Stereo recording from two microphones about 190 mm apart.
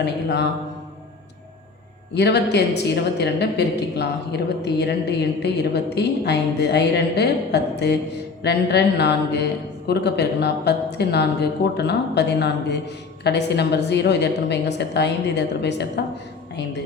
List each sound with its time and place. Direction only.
0.0 s a woman's voice: 60° left (ahead or behind)
2.1 s a woman's voice: 60° left (ahead or behind)